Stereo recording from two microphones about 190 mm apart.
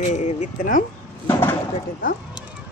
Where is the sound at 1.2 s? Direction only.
15° left (ahead or behind).